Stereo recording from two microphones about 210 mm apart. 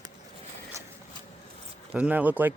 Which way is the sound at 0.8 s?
15° right (ahead or behind).